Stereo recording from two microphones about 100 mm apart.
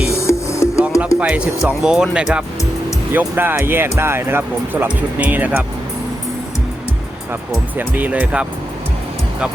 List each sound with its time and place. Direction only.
0.1 s music: 30° left (ahead or behind)
1.2 s speech: 15° right (ahead or behind)
3.1 s speech: 20° right (ahead or behind)
7.8 s speech: 15° right (ahead or behind)